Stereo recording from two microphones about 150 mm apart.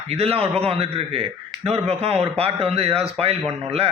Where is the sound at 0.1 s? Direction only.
40° right (ahead or behind).